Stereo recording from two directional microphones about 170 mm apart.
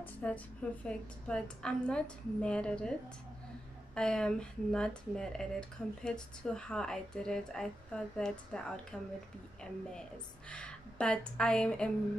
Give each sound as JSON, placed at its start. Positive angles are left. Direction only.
{"t": 0.0, "sound": "a woman's voice", "side_deg": 5}
{"t": 3.9, "sound": "speech", "side_deg": 5}
{"t": 10.5, "sound": "speech", "side_deg": 5}